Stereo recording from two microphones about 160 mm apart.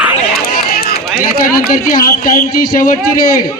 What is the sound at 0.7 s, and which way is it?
Run, 75° left (ahead or behind).